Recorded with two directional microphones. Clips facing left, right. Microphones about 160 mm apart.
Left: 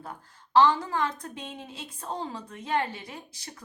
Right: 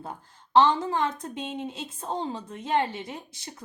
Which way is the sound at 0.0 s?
25° right (ahead or behind).